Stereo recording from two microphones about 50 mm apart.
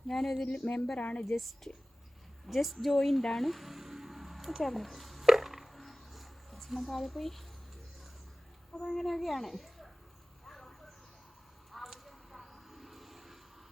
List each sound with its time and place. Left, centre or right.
0.1 s speech: centre
0.4 s speech: centre
1.3 s speech: centre
2.5 s a sound: centre
8.7 s a woman's voice: centre
10.4 s a sound: centre